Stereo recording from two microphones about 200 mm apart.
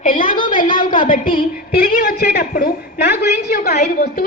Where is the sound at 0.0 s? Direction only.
40° left (ahead or behind).